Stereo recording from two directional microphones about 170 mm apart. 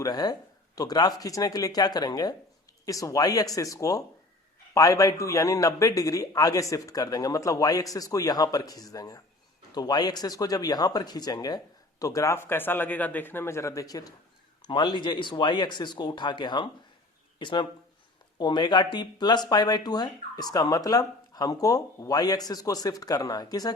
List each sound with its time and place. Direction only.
0.0 s speech: 25° left (ahead or behind)